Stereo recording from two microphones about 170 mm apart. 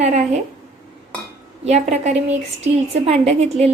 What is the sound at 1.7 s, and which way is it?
A woman's voice, 40° right (ahead or behind).